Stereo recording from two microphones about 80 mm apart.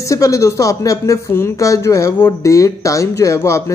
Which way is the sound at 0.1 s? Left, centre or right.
Left.